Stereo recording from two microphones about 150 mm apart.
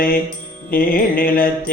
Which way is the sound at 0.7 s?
75° left (ahead or behind).